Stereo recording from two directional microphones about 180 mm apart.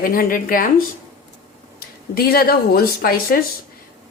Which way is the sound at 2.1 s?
55° left (ahead or behind).